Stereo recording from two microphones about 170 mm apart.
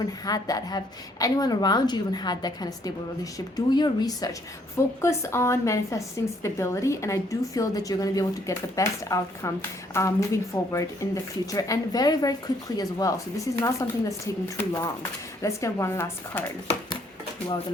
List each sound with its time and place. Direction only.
0.3 s a woman's voice: 20° left (ahead or behind)